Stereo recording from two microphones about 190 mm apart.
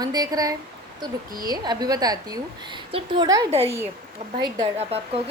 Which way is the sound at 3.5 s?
30° right (ahead or behind).